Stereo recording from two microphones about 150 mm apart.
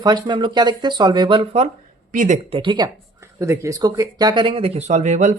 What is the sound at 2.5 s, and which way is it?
Speech, 30° right (ahead or behind).